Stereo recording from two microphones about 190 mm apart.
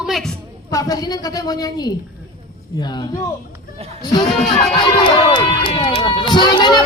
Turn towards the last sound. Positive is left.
turn(degrees=25)  # may be behind; listen again after turning